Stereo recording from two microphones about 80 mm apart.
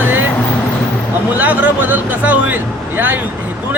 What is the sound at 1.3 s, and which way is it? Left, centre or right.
Speech, right.